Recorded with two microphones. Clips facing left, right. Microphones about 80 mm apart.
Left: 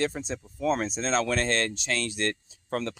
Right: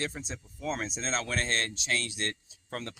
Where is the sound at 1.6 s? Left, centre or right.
Left.